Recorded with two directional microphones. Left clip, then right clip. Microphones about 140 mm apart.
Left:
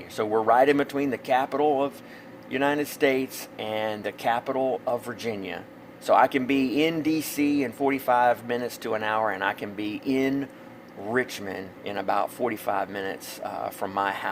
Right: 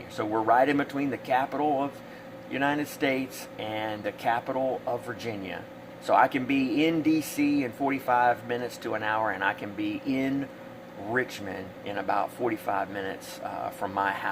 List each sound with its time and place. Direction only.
0.2 s speech: 60° left (ahead or behind)